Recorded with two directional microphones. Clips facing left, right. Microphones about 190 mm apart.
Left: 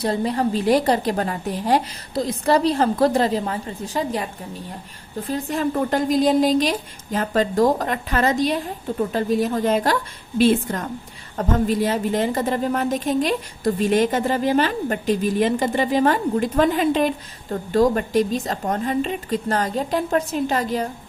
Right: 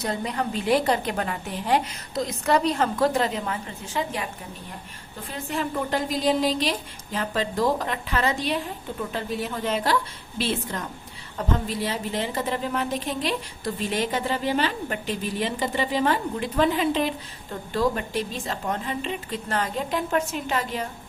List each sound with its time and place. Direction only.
0.0 s a woman's voice: 30° left (ahead or behind)
5.3 s a woman's voice: 40° left (ahead or behind)